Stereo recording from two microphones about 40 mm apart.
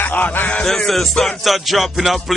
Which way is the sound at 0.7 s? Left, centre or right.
Centre.